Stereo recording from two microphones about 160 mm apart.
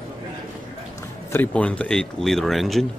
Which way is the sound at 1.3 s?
10° left (ahead or behind).